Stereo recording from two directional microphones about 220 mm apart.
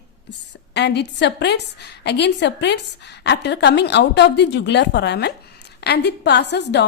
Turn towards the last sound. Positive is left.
turn(degrees=50)  # may be behind; listen again after turning